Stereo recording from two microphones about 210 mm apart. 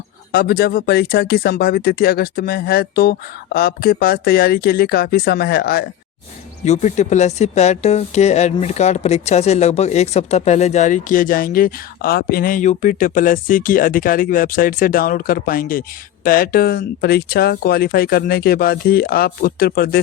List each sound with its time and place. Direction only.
0.3 s speech: 45° left (ahead or behind)
6.7 s speech: 35° left (ahead or behind)